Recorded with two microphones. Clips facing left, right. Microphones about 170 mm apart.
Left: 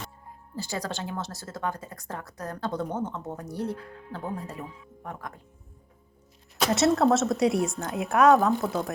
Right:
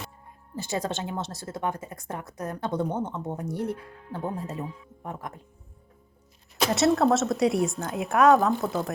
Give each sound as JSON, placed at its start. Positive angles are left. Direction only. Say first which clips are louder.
{"t": 0.5, "sound": "speech", "louder": "right 3 dB", "side_deg": -20}
{"t": 6.6, "sound": "a woman's voice", "louder": "even", "side_deg": 0}